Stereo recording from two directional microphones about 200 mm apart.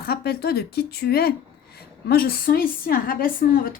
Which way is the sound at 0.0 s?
50° left (ahead or behind).